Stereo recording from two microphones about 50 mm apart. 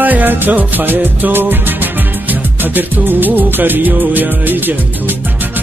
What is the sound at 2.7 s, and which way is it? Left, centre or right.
Music, right.